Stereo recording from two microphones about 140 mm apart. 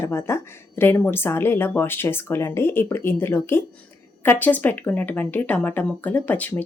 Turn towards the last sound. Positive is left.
turn(degrees=10)  # may be behind; listen again after turning